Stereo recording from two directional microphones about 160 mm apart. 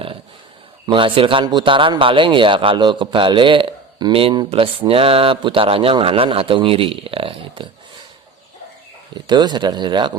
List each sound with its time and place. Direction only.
0.9 s a man's voice: 30° right (ahead or behind)
9.1 s speech: 30° right (ahead or behind)